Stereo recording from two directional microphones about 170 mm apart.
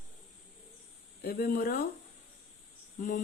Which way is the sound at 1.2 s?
65° left (ahead or behind).